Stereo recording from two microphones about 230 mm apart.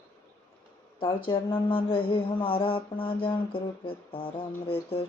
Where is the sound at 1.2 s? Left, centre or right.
Left.